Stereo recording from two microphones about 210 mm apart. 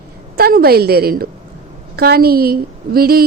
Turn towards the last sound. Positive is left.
turn(degrees=-45)  # may be behind; listen again after turning